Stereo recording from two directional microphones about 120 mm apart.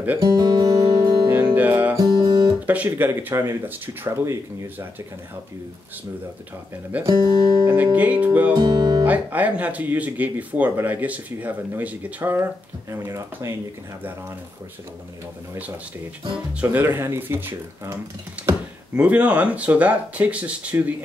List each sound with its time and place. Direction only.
0.2 s guitar: 35° right (ahead or behind)
1.5 s music: 15° right (ahead or behind)
2.0 s guitar: 30° right (ahead or behind)
2.6 s speech: 15° right (ahead or behind)
6.9 s speech: 10° right (ahead or behind)
8.5 s speech: 40° right (ahead or behind)
9.0 s speech: 15° right (ahead or behind)
16.6 s speech: 20° right (ahead or behind)
18.9 s speech: 10° right (ahead or behind)